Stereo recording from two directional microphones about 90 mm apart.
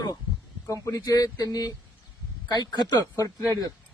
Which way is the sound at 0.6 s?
35° left (ahead or behind).